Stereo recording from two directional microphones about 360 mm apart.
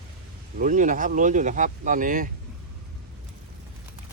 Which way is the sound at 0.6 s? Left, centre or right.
Right.